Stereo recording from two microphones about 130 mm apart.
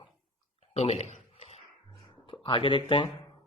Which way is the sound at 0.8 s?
50° left (ahead or behind).